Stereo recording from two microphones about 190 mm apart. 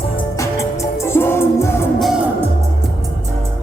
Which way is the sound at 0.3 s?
15° left (ahead or behind).